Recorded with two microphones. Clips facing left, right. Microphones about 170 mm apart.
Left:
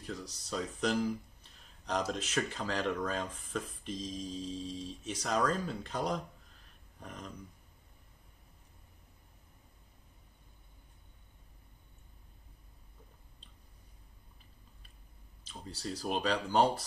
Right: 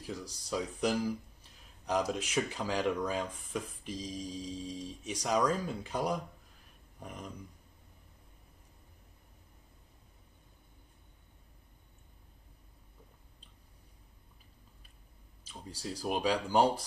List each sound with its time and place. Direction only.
0.0 s speech: 10° right (ahead or behind)
15.4 s speech: 10° right (ahead or behind)